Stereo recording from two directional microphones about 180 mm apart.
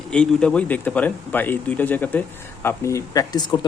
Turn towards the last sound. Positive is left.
turn(degrees=20)  # may be behind; listen again after turning